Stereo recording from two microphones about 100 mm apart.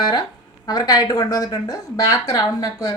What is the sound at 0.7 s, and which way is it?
Speech, 40° left (ahead or behind).